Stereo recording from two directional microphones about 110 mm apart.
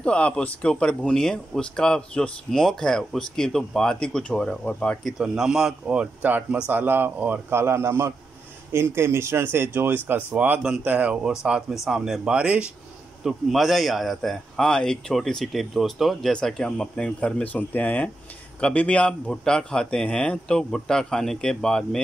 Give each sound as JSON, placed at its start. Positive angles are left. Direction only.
{"t": 0.0, "sound": "speech", "side_deg": 10}
{"t": 5.0, "sound": "speech", "side_deg": -5}